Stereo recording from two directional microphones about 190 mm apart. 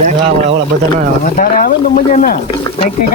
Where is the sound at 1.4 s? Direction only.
45° left (ahead or behind).